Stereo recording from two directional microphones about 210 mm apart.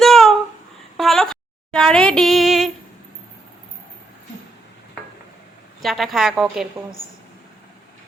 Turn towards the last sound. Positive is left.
turn(degrees=0)  # may be behind; listen again after turning